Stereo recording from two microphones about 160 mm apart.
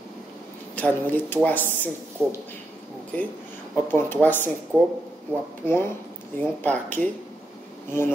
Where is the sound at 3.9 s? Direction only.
10° left (ahead or behind).